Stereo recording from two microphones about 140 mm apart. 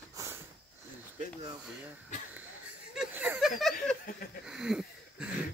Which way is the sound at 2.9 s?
5° right (ahead or behind).